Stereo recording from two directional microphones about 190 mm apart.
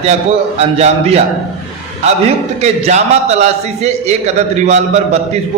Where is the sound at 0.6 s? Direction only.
35° right (ahead or behind).